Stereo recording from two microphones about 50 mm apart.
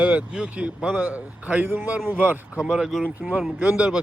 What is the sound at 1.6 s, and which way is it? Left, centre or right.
Speech, right.